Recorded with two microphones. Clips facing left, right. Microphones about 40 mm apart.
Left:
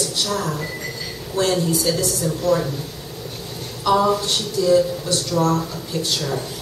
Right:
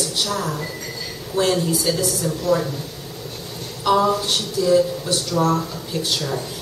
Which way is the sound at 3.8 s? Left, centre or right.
Centre.